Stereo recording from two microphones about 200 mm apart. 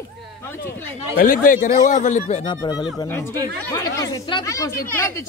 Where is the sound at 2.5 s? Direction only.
20° left (ahead or behind).